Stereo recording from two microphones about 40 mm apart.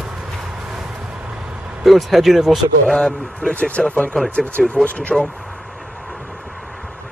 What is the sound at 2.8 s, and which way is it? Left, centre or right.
Speech, centre.